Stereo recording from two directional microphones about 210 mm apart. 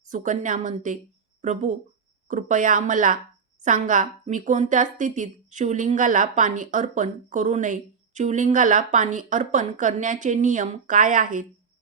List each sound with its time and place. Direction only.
0.1 s a woman's voice: 35° right (ahead or behind)